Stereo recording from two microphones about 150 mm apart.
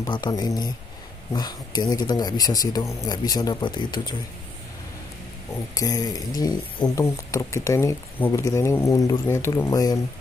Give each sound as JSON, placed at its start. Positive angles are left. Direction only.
{"t": 0.1, "sound": "speech", "side_deg": 30}
{"t": 5.8, "sound": "speech", "side_deg": 25}